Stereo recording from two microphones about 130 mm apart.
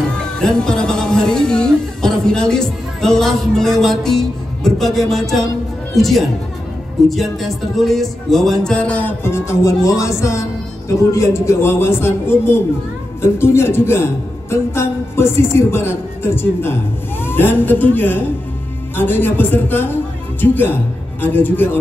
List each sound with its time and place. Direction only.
0.1 s a woman's voice: 5° left (ahead or behind)